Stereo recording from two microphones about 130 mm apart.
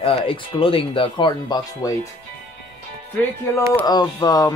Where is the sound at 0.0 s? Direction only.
45° left (ahead or behind).